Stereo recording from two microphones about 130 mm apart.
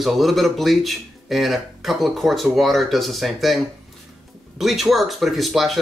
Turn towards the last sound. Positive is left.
turn(degrees=0)  # may be behind; listen again after turning